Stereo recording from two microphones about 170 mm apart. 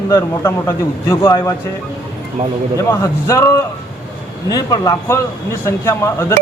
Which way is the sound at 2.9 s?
20° left (ahead or behind).